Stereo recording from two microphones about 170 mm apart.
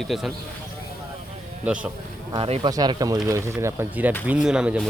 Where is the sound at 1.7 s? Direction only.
5° right (ahead or behind).